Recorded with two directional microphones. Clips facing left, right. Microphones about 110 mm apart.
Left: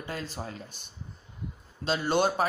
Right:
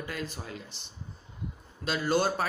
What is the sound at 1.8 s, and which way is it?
Speech, 25° left (ahead or behind).